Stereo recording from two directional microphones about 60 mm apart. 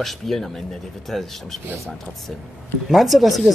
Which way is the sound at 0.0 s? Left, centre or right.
Centre.